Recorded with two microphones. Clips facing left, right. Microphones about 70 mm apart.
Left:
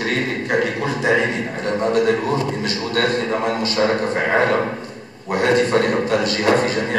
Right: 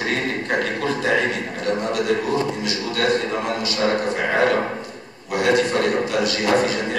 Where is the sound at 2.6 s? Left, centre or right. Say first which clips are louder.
Left 2 dB; left.